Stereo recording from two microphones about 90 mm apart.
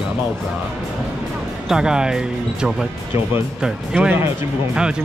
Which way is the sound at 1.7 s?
10° right (ahead or behind).